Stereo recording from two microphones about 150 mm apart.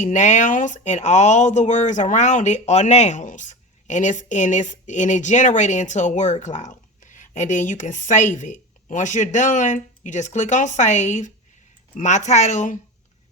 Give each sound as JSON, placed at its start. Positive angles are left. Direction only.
{"t": 0.0, "sound": "speech", "side_deg": 55}